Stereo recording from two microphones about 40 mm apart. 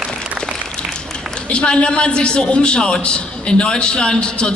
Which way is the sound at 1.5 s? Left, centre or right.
Left.